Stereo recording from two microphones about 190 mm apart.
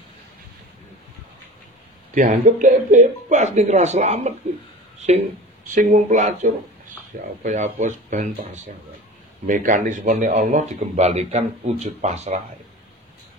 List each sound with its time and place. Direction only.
2.1 s speech: 45° right (ahead or behind)
4.9 s a sound: 35° right (ahead or behind)
5.7 s speech: 40° right (ahead or behind)
9.5 s speech: 45° right (ahead or behind)